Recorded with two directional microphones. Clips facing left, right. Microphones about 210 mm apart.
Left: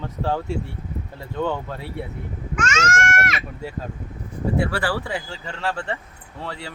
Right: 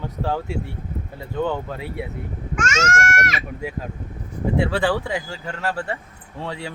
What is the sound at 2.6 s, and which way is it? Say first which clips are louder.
Speech: right 1 dB; 45° right (ahead or behind).